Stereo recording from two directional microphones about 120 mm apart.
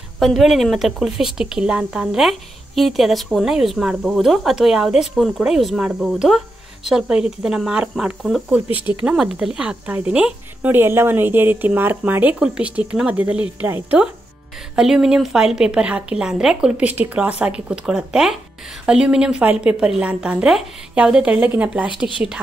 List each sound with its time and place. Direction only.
0.2 s a woman's voice: centre (ahead or behind); by 13.9 s 15° right (ahead or behind)
14.8 s a woman's voice: 5° right (ahead or behind)